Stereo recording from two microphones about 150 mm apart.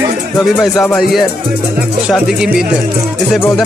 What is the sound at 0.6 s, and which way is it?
Speech, centre (ahead or behind).